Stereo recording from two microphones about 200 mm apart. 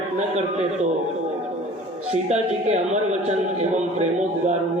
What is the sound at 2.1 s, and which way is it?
A man's voice, 35° right (ahead or behind).